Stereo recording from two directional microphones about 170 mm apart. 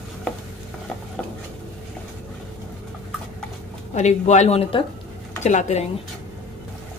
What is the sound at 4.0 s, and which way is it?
Speech, 40° left (ahead or behind).